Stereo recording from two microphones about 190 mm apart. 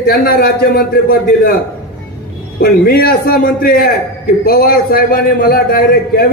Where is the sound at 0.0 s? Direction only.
50° left (ahead or behind).